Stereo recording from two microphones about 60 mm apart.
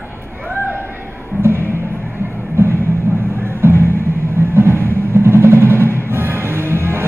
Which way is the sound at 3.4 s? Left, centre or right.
Right.